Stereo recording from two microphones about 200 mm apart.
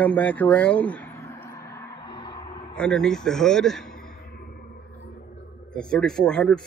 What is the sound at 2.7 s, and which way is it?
A man's voice, 5° left (ahead or behind).